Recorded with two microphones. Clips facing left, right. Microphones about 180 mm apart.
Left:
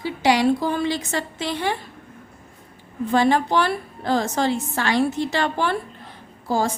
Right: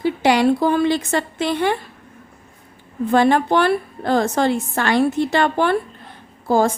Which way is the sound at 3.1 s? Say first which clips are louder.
Right 3 dB; 55° right (ahead or behind).